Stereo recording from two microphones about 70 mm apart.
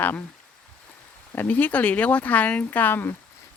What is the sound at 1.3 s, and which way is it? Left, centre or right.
Speech, left.